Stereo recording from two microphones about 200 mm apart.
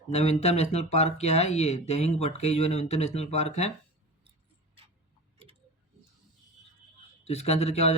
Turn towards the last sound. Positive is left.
turn(degrees=30)  # may be behind; listen again after turning